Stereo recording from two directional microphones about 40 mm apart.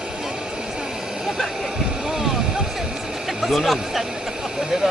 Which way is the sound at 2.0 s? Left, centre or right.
Centre.